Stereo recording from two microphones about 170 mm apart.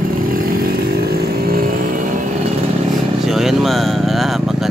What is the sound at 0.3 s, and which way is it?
Vehicle, 60° right (ahead or behind).